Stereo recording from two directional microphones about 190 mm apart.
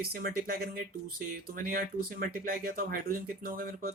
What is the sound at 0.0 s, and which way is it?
Speech, 50° right (ahead or behind).